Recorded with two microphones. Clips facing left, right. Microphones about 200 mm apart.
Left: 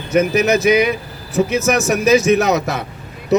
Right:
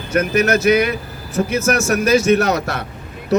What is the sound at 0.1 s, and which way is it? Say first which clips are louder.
Speech: left 2 dB; 10° left (ahead or behind).